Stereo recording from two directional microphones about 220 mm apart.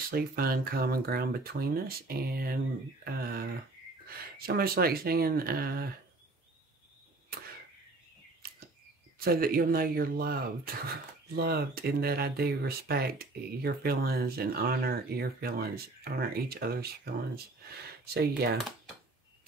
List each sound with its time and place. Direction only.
0.1 s speech: 45° right (ahead or behind)
8.4 s a sound: 40° right (ahead or behind)
9.2 s speech: 40° right (ahead or behind)